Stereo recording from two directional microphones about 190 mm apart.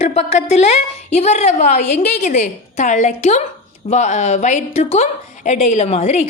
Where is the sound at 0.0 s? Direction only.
35° left (ahead or behind).